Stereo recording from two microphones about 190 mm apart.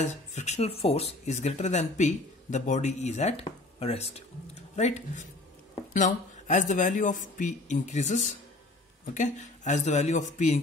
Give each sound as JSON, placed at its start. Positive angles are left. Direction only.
{"t": 0.0, "sound": "speech", "side_deg": 40}